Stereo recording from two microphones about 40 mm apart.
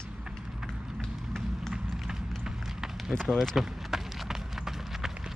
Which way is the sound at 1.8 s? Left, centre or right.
Centre.